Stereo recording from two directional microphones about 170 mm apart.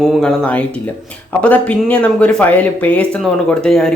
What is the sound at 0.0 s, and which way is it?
Speech, centre (ahead or behind).